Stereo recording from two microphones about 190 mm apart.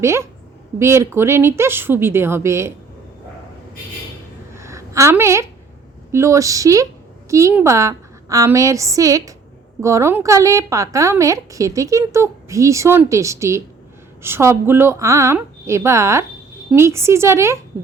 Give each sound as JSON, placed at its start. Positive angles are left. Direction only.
{"t": 0.0, "sound": "a woman's voice", "side_deg": -15}
{"t": 4.5, "sound": "a sound", "side_deg": -15}
{"t": 6.1, "sound": "a woman's voice", "side_deg": -15}